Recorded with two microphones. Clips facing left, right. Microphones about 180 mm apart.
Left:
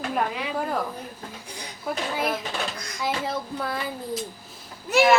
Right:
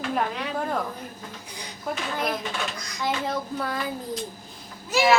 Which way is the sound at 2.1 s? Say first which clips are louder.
Left 1 dB; 5° left (ahead or behind).